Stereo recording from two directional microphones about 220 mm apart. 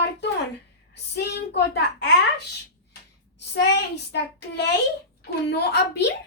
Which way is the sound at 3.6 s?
50° left (ahead or behind).